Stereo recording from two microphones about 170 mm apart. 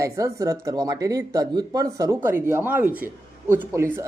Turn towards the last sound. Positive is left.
turn(degrees=-15)  # may be behind; listen again after turning